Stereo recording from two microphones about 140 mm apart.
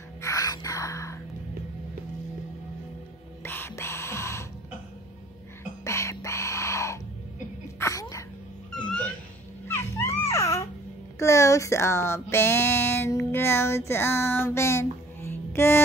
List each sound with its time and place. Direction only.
0.2 s a sound: 25° left (ahead or behind)
3.4 s music: 15° left (ahead or behind)
5.9 s a sound: 20° left (ahead or behind)
8.7 s cat: 10° left (ahead or behind)
9.7 s music: 20° left (ahead or behind)
11.1 s speech: 20° left (ahead or behind)